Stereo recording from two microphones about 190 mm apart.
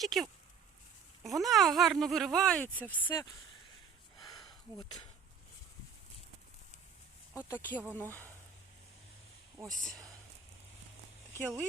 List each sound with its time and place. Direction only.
0.0 s speech: centre (ahead or behind)
4.4 s a sound: 25° left (ahead or behind)
7.3 s speech: 10° left (ahead or behind)
9.8 s speech: 5° left (ahead or behind)
11.3 s speech: 5° left (ahead or behind)